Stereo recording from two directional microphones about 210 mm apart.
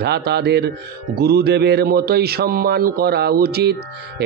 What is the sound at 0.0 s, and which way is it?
Speech, 50° right (ahead or behind).